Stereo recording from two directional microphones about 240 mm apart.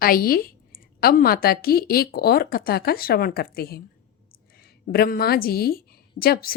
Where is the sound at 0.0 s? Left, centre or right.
Left.